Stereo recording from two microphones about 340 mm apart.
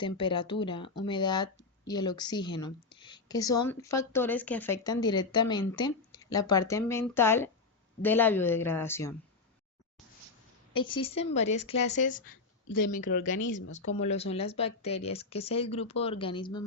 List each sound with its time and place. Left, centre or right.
0.0 s a woman's voice: centre
10.8 s a woman's voice: centre
12.7 s speech: left
13.1 s speech: left
13.4 s speech: left
14.1 s a woman's voice: centre